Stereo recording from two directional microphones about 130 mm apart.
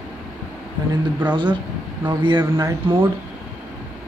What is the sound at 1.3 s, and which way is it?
Speech, 35° right (ahead or behind).